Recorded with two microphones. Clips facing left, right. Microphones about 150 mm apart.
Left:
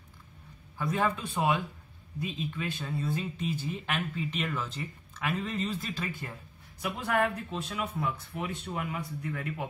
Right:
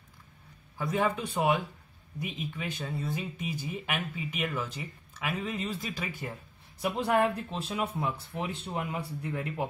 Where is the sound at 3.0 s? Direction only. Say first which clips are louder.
Left 2 dB; 10° right (ahead or behind).